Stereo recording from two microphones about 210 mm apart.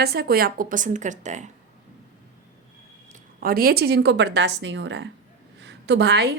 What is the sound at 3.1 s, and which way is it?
A woman's voice, 45° right (ahead or behind).